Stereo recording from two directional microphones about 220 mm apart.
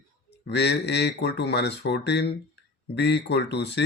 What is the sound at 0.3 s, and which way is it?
Speech, 50° left (ahead or behind).